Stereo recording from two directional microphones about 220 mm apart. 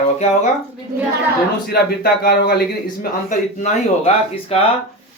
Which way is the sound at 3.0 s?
35° left (ahead or behind).